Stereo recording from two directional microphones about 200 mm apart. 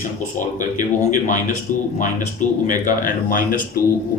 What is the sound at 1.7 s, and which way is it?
Speech, 40° left (ahead or behind).